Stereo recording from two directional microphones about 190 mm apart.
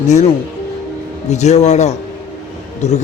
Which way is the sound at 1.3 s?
35° left (ahead or behind).